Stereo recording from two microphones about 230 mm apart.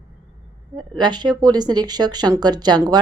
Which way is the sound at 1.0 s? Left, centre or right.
Centre.